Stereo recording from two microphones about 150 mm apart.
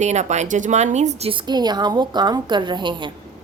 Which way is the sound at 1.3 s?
30° right (ahead or behind).